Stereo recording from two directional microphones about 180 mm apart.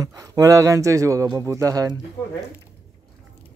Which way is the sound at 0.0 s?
20° right (ahead or behind).